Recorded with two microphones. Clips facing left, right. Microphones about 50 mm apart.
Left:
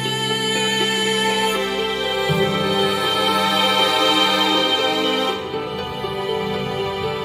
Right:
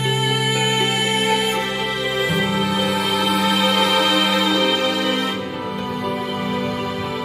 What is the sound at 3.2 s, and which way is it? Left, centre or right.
Music, left.